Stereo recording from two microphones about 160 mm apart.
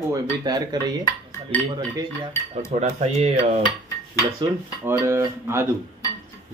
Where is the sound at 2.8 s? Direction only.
45° right (ahead or behind).